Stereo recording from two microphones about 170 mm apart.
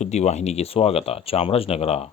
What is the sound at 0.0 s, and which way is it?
Speech, 40° left (ahead or behind).